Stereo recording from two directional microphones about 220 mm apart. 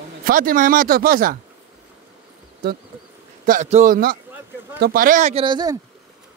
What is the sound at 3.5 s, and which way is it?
Speech, 35° right (ahead or behind).